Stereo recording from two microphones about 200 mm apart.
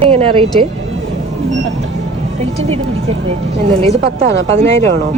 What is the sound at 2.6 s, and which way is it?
A woman's voice, 30° right (ahead or behind).